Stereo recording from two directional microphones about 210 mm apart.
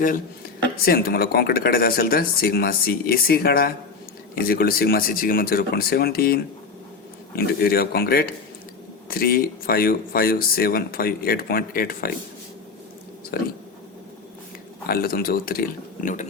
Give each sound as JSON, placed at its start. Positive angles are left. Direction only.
{"t": 0.9, "sound": "speech", "side_deg": 45}
{"t": 13.3, "sound": "speech", "side_deg": 50}
{"t": 14.8, "sound": "speech", "side_deg": 45}